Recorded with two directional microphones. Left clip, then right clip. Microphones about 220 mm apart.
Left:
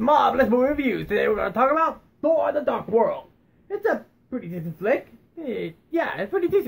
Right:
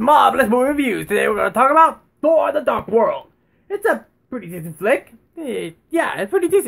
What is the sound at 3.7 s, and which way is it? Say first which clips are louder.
Speech: right 5 dB; 40° right (ahead or behind).